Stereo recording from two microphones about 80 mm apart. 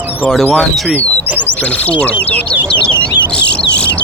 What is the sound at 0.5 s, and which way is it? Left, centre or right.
Speech, centre.